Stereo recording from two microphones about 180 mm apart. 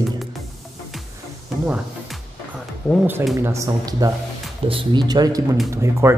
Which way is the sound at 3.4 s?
20° right (ahead or behind).